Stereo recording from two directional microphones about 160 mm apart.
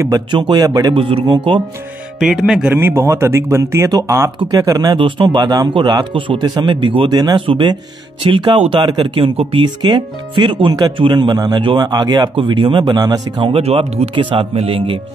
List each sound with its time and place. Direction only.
0.0 s speech: 25° right (ahead or behind)
2.1 s speech: centre (ahead or behind)
2.7 s speech: 15° right (ahead or behind); by 15.0 s 35° right (ahead or behind)